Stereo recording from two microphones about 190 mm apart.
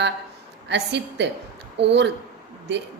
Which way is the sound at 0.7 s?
65° right (ahead or behind).